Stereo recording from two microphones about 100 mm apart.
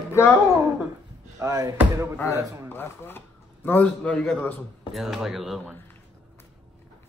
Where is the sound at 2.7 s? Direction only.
20° left (ahead or behind).